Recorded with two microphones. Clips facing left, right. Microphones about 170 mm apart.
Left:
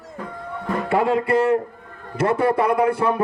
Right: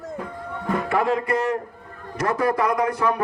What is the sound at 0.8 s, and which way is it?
A man's voice, 30° left (ahead or behind).